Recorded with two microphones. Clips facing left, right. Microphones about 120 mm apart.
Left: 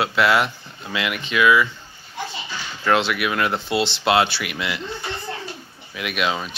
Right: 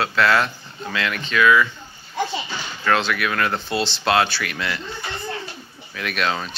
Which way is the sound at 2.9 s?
20° left (ahead or behind).